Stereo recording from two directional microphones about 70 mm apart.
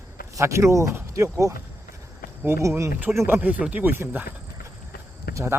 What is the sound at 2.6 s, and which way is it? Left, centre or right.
A man's voice, right.